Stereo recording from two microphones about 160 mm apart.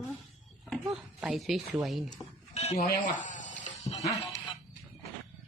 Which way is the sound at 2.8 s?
55° left (ahead or behind).